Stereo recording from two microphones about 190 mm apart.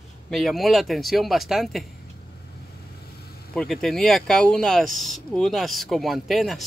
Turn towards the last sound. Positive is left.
turn(degrees=0)  # may be behind; listen again after turning